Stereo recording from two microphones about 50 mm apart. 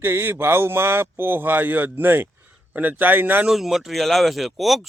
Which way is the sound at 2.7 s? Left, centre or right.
Right.